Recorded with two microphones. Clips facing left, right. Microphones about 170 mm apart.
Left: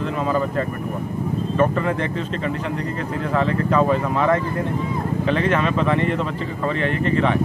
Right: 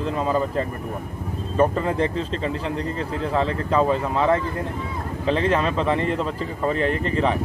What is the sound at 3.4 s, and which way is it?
Speech, 30° right (ahead or behind).